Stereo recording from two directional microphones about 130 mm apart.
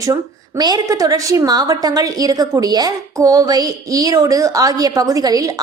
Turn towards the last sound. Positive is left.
turn(degrees=-30)  # may be behind; listen again after turning